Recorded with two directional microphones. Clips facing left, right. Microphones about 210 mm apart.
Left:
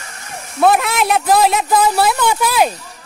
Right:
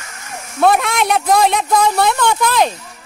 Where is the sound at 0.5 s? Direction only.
Centre (ahead or behind).